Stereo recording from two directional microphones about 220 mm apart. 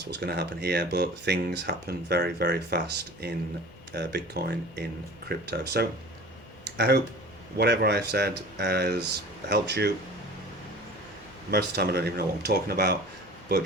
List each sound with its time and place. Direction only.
0.1 s speech: 45° right (ahead or behind)
11.5 s speech: 45° right (ahead or behind)